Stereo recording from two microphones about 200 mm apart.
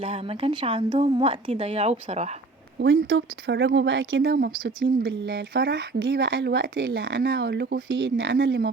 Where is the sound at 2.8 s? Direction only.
60° right (ahead or behind).